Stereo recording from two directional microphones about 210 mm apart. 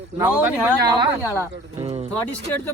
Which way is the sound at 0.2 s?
5° right (ahead or behind).